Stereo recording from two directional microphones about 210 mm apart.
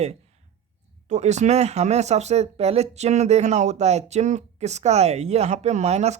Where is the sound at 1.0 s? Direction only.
35° right (ahead or behind).